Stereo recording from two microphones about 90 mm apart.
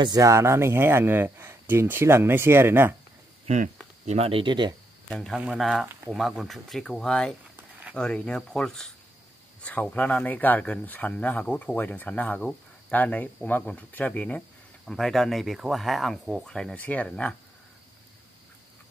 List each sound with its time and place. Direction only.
0.2 s speech: 35° right (ahead or behind)
4.3 s speech: 65° right (ahead or behind)
5.1 s speech: 5° left (ahead or behind)
14.9 s speech: 5° left (ahead or behind)